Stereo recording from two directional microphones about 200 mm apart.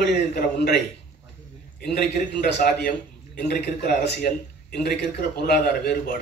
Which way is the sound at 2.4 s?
55° left (ahead or behind).